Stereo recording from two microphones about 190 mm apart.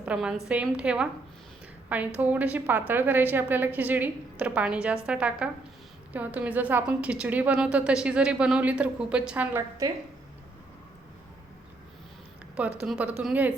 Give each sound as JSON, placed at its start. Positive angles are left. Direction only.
{"t": 0.0, "sound": "a woman's voice", "side_deg": -5}
{"t": 12.5, "sound": "a woman's voice", "side_deg": -5}